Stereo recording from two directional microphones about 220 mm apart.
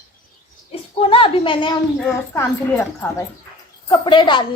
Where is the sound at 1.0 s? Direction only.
25° left (ahead or behind).